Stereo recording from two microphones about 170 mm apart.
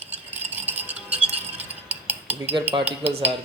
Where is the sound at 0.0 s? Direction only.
10° right (ahead or behind).